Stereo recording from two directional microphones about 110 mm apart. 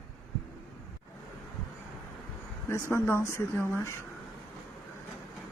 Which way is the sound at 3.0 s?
25° left (ahead or behind).